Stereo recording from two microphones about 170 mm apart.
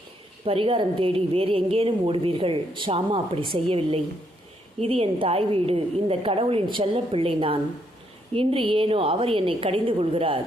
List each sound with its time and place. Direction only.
0.4 s a woman's voice: 30° right (ahead or behind)